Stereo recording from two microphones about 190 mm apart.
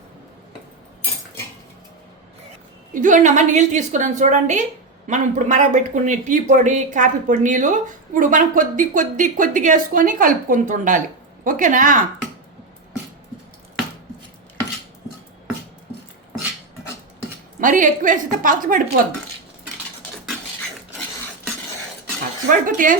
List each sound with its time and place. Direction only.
2.9 s a woman's voice: 40° right (ahead or behind)
17.6 s speech: 45° right (ahead or behind)
22.4 s speech: 45° right (ahead or behind)